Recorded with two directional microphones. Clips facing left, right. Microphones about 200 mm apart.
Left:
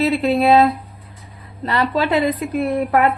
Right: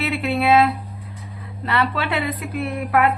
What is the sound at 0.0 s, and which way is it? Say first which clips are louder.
A woman's voice: left 5 dB; 40° left (ahead or behind).